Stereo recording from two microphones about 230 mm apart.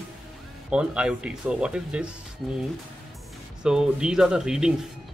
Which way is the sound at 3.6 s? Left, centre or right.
Centre.